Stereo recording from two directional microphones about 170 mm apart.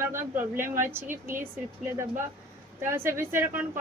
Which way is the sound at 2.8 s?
15° right (ahead or behind).